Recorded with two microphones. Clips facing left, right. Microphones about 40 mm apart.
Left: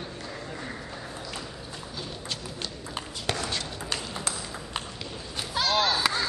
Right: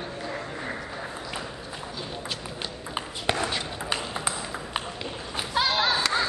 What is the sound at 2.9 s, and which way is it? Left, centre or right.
Ping, centre.